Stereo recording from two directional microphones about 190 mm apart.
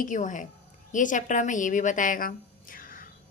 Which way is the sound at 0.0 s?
40° left (ahead or behind).